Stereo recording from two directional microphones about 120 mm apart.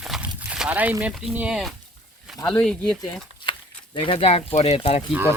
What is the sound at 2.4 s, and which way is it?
Speech, 5° left (ahead or behind).